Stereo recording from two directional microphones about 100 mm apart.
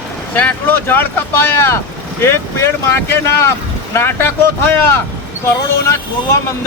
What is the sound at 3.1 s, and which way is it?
Speech, 25° left (ahead or behind).